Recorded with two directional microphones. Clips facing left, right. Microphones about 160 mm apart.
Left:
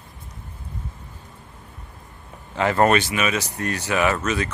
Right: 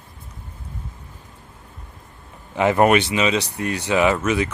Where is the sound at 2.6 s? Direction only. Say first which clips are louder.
Right 2 dB; 15° right (ahead or behind).